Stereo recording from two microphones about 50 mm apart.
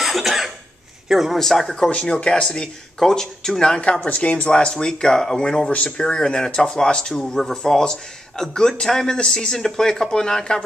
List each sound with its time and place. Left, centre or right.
0.0 s cough: centre
1.0 s a man's voice: centre
1.9 s speech: left
3.8 s speech: left
5.7 s speech: left